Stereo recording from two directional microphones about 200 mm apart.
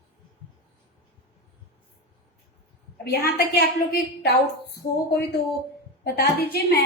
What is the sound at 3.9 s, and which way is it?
A woman's voice, 50° left (ahead or behind).